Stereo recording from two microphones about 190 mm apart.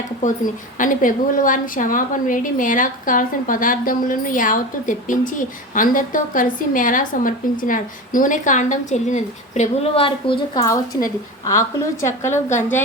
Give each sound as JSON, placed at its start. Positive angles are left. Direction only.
{"t": 0.2, "sound": "a woman's voice", "side_deg": 40}